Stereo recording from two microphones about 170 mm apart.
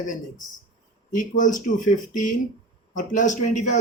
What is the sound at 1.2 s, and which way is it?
Speech, 50° left (ahead or behind).